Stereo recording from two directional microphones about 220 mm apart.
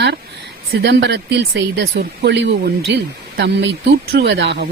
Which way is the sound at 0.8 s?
50° right (ahead or behind).